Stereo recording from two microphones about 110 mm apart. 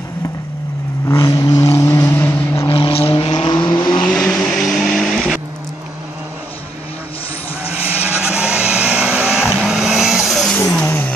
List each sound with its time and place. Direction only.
1.0 s vehicle: 30° left (ahead or behind)
1.7 s vehicle: 25° left (ahead or behind)
2.7 s vehicle: 55° left (ahead or behind); by 4.0 s 40° left (ahead or behind)
4.0 s vehicle: 5° left (ahead or behind)
8.4 s vehicle: 10° right (ahead or behind)
10.8 s vehicle: 15° left (ahead or behind)